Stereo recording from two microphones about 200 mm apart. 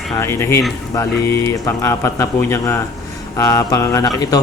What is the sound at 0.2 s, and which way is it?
Speech, 10° left (ahead or behind).